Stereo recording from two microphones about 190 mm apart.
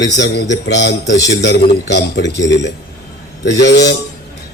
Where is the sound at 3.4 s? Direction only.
65° left (ahead or behind).